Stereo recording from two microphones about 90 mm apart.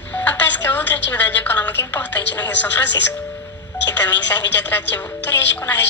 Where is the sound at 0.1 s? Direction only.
20° left (ahead or behind).